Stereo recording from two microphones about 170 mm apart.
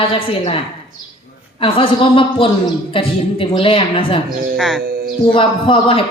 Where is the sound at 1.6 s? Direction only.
30° left (ahead or behind).